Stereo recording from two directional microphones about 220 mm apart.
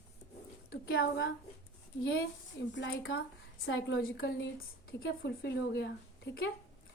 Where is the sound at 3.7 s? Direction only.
65° left (ahead or behind).